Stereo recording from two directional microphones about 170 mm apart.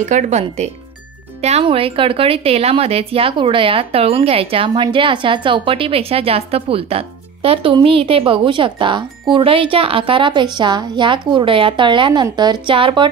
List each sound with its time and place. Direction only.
0.0 s a woman's voice: 45° right (ahead or behind); by 13.1 s 30° right (ahead or behind)